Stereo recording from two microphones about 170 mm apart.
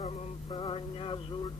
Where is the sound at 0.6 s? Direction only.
30° left (ahead or behind).